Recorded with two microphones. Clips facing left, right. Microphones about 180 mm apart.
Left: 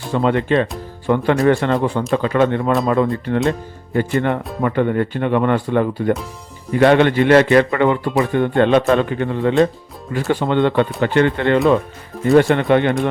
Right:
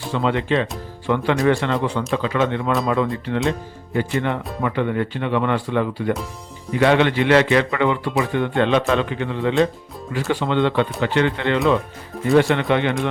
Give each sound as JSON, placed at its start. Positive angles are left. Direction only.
{"t": 0.1, "sound": "speech", "side_deg": 45}